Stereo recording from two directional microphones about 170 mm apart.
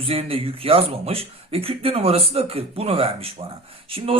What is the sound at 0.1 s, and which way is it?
A man's voice, 35° right (ahead or behind).